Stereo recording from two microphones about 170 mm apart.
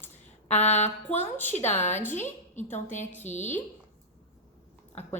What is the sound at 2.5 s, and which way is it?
A woman's voice, 45° left (ahead or behind).